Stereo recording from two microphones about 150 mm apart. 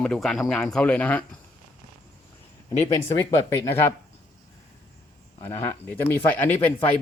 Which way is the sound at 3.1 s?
15° left (ahead or behind).